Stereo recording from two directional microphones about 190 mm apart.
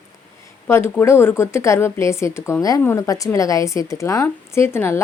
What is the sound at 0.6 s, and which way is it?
Speech, 15° left (ahead or behind).